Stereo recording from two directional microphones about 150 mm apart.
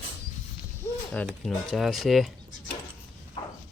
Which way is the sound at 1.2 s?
Centre (ahead or behind).